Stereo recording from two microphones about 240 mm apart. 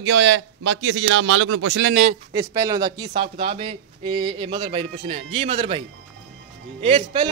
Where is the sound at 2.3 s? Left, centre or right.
Centre.